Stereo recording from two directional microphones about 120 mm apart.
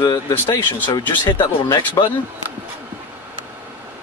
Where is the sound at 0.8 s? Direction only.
40° left (ahead or behind).